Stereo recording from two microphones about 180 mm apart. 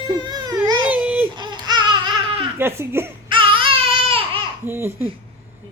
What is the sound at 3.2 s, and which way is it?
Baby cry, 30° right (ahead or behind).